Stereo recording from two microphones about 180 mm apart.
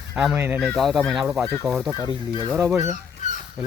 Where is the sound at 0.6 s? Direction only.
Centre (ahead or behind).